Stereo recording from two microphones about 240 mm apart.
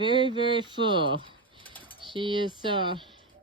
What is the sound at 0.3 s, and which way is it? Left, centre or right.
Speech, centre.